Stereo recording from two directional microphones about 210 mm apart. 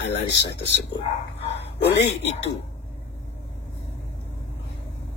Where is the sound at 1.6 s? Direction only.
55° left (ahead or behind).